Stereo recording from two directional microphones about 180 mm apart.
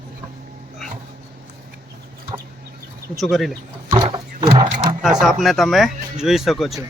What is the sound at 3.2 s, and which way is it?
Speech, centre (ahead or behind).